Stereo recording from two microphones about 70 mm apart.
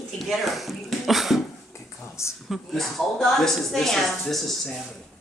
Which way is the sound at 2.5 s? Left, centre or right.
Centre.